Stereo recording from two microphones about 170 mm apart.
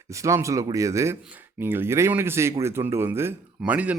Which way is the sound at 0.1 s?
15° right (ahead or behind).